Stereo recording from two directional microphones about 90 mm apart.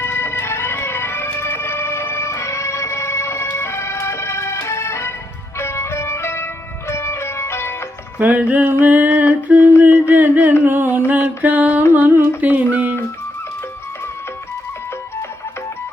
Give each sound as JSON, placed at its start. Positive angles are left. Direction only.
{"t": 0.0, "sound": "music", "side_deg": 25}
{"t": 8.2, "sound": "music", "side_deg": -15}
{"t": 8.8, "sound": "a sound", "side_deg": -15}
{"t": 10.6, "sound": "music", "side_deg": -20}